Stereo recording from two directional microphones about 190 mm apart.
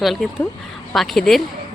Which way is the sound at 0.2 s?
Centre (ahead or behind).